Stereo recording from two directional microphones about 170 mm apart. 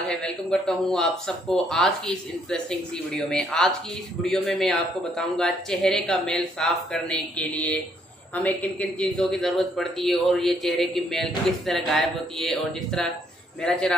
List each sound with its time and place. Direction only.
0.1 s a man's voice: 5° left (ahead or behind)